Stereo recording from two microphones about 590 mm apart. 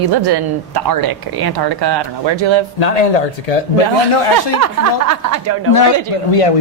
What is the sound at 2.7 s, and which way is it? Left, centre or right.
Speech, left.